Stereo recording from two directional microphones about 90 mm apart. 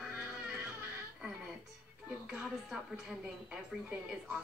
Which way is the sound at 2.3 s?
5° right (ahead or behind).